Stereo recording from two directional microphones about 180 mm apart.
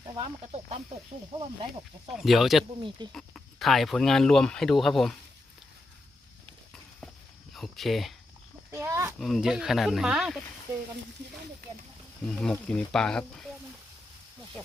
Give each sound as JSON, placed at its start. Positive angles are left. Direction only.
{"t": 0.0, "sound": "speech", "side_deg": -30}
{"t": 2.0, "sound": "speech", "side_deg": 0}
{"t": 7.5, "sound": "speech", "side_deg": 0}
{"t": 8.7, "sound": "speech", "side_deg": -15}
{"t": 9.1, "sound": "speech", "side_deg": 0}
{"t": 12.2, "sound": "speech", "side_deg": 5}